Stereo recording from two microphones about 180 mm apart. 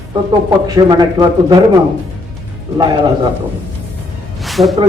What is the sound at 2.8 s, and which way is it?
Speech, 25° right (ahead or behind).